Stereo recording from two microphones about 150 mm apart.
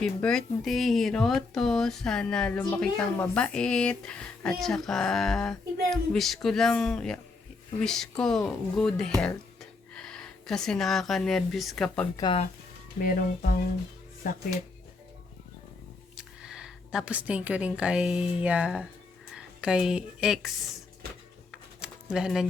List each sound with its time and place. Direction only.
0.0 s speech: 5° left (ahead or behind)
13.0 s speech: 70° left (ahead or behind)
16.1 s a woman's voice: 5° right (ahead or behind)
21.8 s a sound: 5° right (ahead or behind)